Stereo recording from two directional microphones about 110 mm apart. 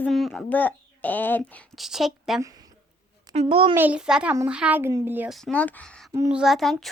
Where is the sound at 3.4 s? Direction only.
55° right (ahead or behind).